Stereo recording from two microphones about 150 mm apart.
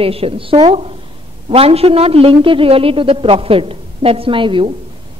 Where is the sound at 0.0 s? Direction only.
40° right (ahead or behind).